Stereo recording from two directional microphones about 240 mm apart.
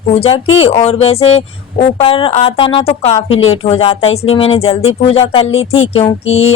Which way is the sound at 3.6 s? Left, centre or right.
Left.